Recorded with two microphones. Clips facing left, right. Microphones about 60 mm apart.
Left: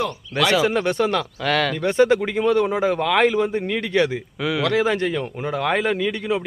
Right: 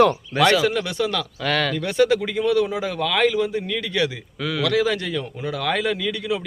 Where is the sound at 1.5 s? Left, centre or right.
Centre.